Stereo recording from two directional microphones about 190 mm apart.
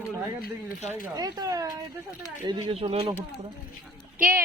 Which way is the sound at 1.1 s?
20° right (ahead or behind).